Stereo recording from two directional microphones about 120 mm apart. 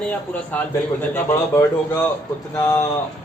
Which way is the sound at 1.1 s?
25° left (ahead or behind).